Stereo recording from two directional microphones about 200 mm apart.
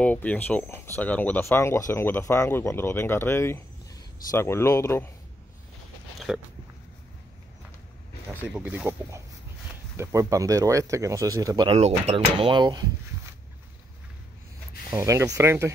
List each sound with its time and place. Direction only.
0.0 s speech: 5° left (ahead or behind)
6.1 s a sound: centre (ahead or behind)
8.3 s speech: 5° right (ahead or behind)
14.9 s speech: 15° right (ahead or behind)